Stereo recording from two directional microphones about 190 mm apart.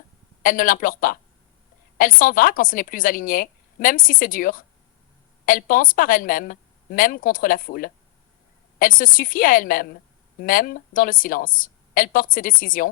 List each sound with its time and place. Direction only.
0.4 s a woman's voice: 45° left (ahead or behind)